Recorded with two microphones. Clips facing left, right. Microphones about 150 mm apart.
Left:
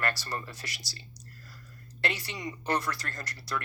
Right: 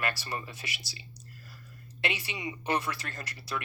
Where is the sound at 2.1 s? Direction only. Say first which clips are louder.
Right 1 dB; 5° right (ahead or behind).